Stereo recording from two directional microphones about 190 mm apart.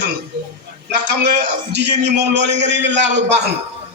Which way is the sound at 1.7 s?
65° right (ahead or behind).